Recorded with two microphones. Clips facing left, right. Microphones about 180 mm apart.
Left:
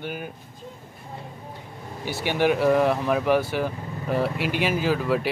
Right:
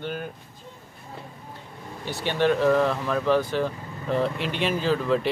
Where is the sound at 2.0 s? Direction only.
10° left (ahead or behind).